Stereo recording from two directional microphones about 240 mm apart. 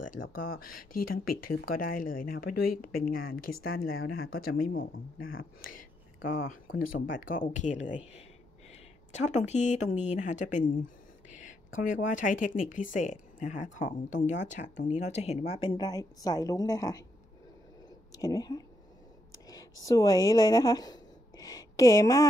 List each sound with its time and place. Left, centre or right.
0.7 s speech: left
1.5 s speech: left
3.6 s speech: left
4.3 s speech: left
5.2 s speech: left
5.8 s a sound: left
7.1 s speech: left
9.1 s a woman's voice: left; by 17.0 s centre
18.1 s speech: centre
19.4 s a sound: centre